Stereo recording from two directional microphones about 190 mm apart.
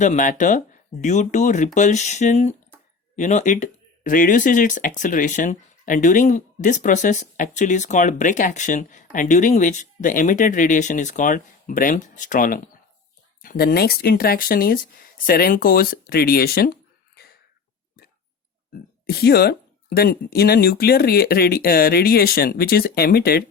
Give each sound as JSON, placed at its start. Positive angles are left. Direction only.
{"t": 0.0, "sound": "speech", "side_deg": 40}
{"t": 18.7, "sound": "speech", "side_deg": 55}